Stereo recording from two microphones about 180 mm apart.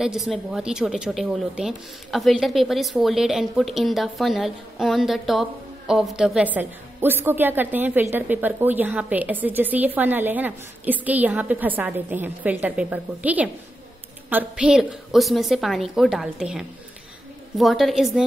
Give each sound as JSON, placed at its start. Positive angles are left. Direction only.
{"t": 0.0, "sound": "a woman's voice", "side_deg": 0}